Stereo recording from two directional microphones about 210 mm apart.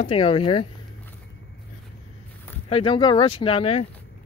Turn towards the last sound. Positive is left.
turn(degrees=30)  # may be behind; listen again after turning